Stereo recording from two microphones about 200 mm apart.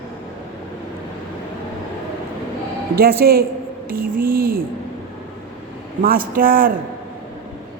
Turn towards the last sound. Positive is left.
turn(degrees=-45)  # may be behind; listen again after turning